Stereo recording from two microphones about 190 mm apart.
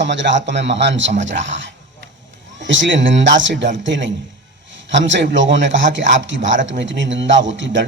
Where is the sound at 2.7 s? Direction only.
75° right (ahead or behind).